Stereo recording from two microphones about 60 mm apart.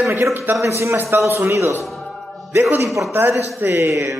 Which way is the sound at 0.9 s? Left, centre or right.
Right.